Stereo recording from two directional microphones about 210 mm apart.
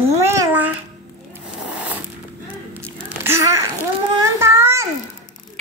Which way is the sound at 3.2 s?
10° right (ahead or behind).